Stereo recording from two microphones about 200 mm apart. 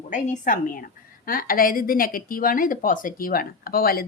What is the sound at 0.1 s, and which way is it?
A woman's voice, 40° left (ahead or behind).